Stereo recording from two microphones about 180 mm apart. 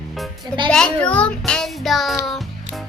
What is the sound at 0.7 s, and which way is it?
Child singing, 5° left (ahead or behind).